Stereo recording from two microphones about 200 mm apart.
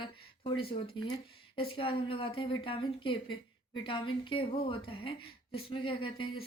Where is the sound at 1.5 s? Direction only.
25° left (ahead or behind).